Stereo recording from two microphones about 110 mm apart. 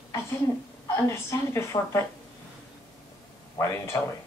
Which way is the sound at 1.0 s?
25° left (ahead or behind).